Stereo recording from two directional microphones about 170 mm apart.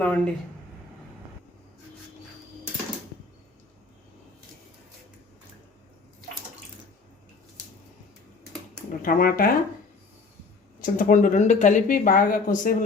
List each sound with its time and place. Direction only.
0.0 s speech: 5° left (ahead or behind)
9.0 s speech: 55° left (ahead or behind)
10.8 s speech: 50° left (ahead or behind)